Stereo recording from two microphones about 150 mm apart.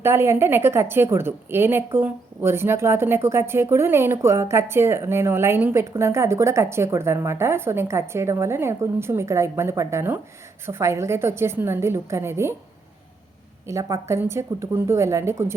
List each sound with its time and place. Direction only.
0.0 s a woman's voice: 15° right (ahead or behind)
13.7 s a woman's voice: 20° right (ahead or behind)